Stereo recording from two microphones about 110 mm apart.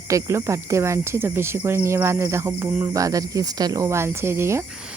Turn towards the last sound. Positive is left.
turn(degrees=-25)  # may be behind; listen again after turning